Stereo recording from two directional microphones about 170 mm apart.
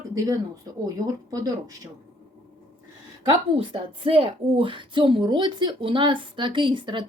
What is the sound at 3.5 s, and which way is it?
Speech, 35° right (ahead or behind).